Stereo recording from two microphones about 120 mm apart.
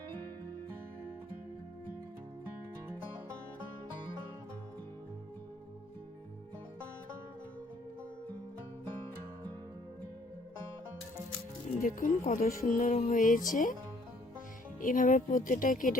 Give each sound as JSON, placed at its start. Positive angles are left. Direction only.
{"t": 11.8, "sound": "music", "side_deg": 90}
{"t": 14.8, "sound": "music", "side_deg": 90}